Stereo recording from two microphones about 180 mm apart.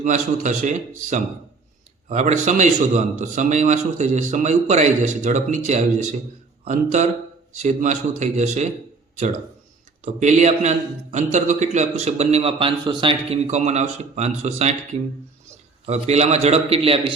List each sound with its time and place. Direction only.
0.0 s a man's voice: 45° right (ahead or behind)
10.0 s a man's voice: 40° right (ahead or behind)